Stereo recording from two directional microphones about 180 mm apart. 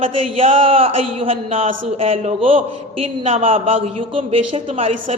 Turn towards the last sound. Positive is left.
turn(degrees=-35)  # may be behind; listen again after turning